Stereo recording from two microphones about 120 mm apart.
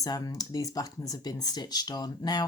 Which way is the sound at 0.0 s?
30° left (ahead or behind).